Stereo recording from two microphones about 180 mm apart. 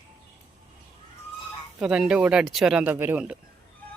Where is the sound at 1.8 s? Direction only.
5° right (ahead or behind).